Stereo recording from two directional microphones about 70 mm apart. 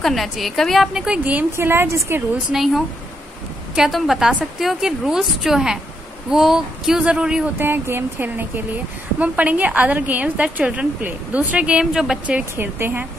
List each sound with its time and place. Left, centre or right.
0.0 s a woman's voice: centre
0.9 s speech: centre
1.6 s a woman's voice: right
2.5 s a woman's voice: centre
7.5 s speech: right; by 12.2 s centre
12.5 s a woman's voice: right